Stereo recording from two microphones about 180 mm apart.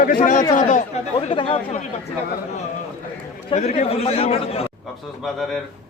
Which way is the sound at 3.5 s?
35° left (ahead or behind).